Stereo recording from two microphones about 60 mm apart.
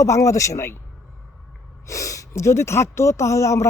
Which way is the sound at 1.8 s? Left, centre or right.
Left.